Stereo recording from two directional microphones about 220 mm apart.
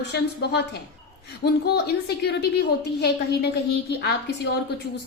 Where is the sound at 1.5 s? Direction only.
45° left (ahead or behind).